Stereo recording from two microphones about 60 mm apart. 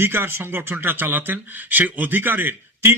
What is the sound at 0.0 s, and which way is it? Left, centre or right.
Speech, right.